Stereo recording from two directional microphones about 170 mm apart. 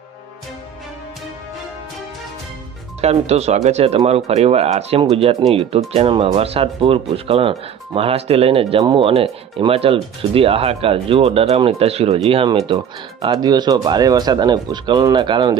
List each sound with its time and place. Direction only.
3.0 s speech: 40° right (ahead or behind)